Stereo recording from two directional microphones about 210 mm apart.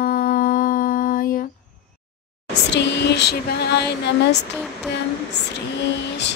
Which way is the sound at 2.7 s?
55° left (ahead or behind).